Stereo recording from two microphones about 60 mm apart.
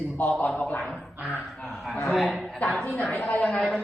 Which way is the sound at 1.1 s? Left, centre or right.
Right.